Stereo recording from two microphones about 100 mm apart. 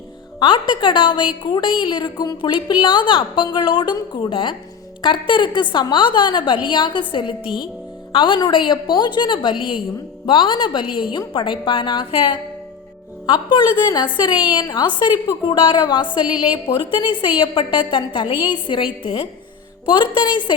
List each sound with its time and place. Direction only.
0.3 s a woman's voice: 50° left (ahead or behind)
1.5 s a woman's voice: 45° left (ahead or behind)